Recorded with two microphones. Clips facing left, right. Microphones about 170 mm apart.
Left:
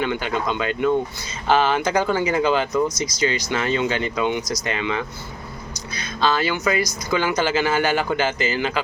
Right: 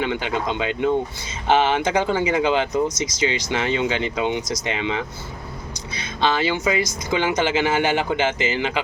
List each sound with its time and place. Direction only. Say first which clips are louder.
0.0 s speech: even; 20° right (ahead or behind)
6.1 s speech: even; 20° right (ahead or behind)